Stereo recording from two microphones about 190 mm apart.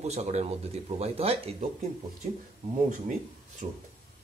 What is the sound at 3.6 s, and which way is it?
Speech, 35° right (ahead or behind).